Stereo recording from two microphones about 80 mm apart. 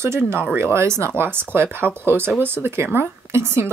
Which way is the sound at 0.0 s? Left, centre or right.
Right.